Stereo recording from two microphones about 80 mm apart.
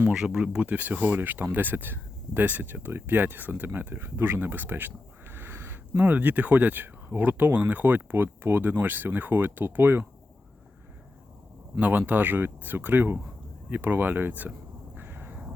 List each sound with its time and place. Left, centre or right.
0.1 s speech: centre
11.8 s speech: right
14.9 s cat: right